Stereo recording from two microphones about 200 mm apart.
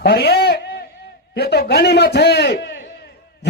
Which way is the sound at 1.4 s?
55° left (ahead or behind).